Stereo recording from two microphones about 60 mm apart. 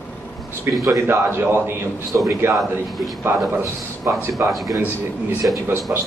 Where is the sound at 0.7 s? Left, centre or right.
Right.